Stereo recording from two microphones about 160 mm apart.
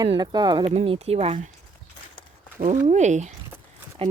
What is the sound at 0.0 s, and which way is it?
Speech, 30° right (ahead or behind).